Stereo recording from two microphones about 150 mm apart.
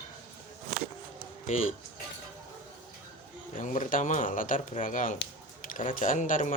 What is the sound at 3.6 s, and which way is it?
Speech, 60° left (ahead or behind).